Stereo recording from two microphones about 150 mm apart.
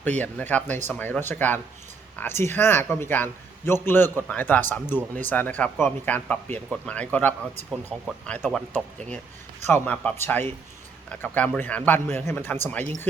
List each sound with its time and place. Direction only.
0.0 s a man's voice: 10° left (ahead or behind)
8.4 s a man's voice: 5° left (ahead or behind)